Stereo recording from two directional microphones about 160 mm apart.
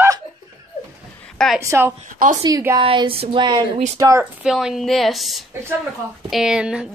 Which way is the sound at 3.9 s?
20° right (ahead or behind).